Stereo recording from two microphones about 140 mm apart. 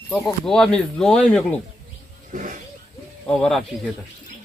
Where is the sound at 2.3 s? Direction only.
70° right (ahead or behind).